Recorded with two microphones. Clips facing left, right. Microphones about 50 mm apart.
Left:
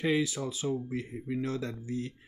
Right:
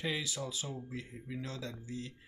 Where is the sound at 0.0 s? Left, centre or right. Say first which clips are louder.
Left 8 dB; left.